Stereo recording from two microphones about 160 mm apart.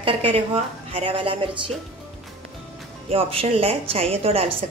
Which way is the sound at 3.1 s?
35° right (ahead or behind).